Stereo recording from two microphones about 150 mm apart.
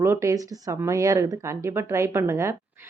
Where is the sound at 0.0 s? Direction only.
20° right (ahead or behind).